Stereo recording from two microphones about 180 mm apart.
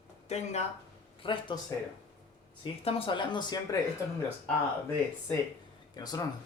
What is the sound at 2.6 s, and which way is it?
Speech, 30° left (ahead or behind).